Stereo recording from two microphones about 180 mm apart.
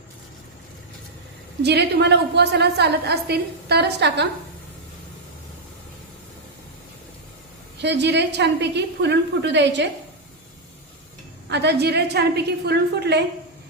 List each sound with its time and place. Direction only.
1.6 s a woman's voice: 65° right (ahead or behind)
7.8 s a woman's voice: 70° right (ahead or behind)
11.4 s a woman's voice: 70° right (ahead or behind)